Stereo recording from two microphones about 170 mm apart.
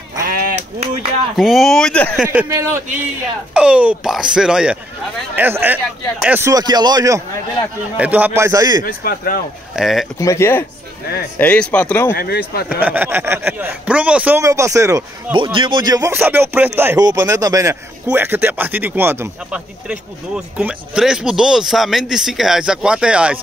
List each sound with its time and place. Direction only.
0.2 s honk: 55° right (ahead or behind)
1.3 s speech: centre (ahead or behind)
2.2 s speech: 15° right (ahead or behind)
6.5 s speech: 25° right (ahead or behind)
8.0 s speech: 10° right (ahead or behind)
8.8 s speech: 60° left (ahead or behind)
9.8 s speech: centre (ahead or behind)
10.1 s speech: 15° left (ahead or behind)
12.2 s speech: 65° left (ahead or behind)
12.6 s speech: 10° right (ahead or behind)
15.3 s speech: 30° right (ahead or behind); by 23.4 s 5° right (ahead or behind)